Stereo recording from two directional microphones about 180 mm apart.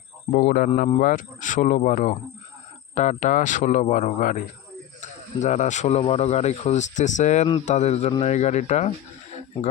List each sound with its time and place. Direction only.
0.3 s speech: 50° left (ahead or behind)